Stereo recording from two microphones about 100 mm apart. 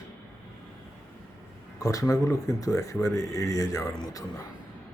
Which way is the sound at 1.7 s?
35° left (ahead or behind).